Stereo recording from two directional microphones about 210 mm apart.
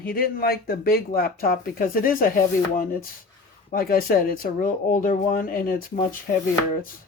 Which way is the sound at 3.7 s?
45° left (ahead or behind).